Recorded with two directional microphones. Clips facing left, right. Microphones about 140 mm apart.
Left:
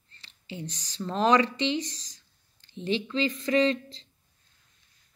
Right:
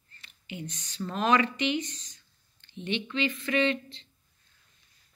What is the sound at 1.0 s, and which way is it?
Speech, 30° left (ahead or behind).